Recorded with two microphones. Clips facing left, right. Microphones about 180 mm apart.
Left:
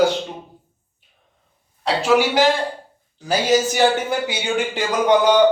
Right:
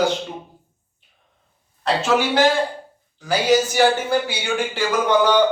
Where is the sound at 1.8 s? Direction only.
10° left (ahead or behind).